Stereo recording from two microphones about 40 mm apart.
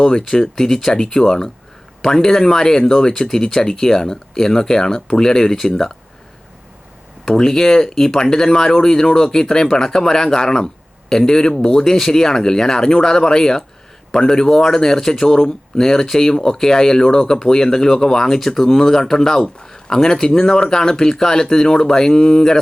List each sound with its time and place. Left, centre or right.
0.0 s speech: centre
7.3 s speech: centre